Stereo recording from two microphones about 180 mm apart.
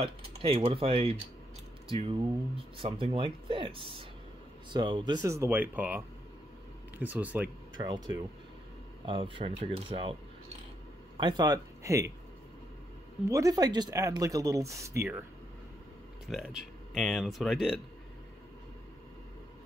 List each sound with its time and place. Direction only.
0.0 s speech: 30° right (ahead or behind); by 7.4 s 10° right (ahead or behind)
7.7 s speech: 25° right (ahead or behind)
11.1 s speech: 25° right (ahead or behind)
13.3 s speech: 20° right (ahead or behind)
16.3 s speech: centre (ahead or behind)